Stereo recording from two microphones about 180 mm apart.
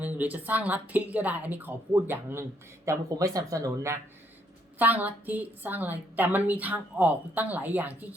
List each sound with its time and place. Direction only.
0.0 s a woman's voice: 10° right (ahead or behind)